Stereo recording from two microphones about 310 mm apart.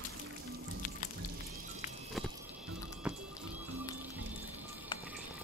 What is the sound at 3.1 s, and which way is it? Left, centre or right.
Music, centre.